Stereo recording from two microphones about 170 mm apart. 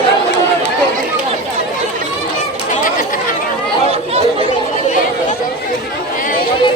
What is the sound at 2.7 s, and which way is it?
Chatter, 55° left (ahead or behind).